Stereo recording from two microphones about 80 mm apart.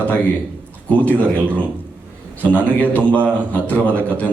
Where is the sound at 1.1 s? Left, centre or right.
Right.